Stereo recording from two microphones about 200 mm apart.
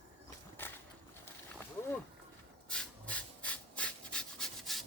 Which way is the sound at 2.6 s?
5° left (ahead or behind).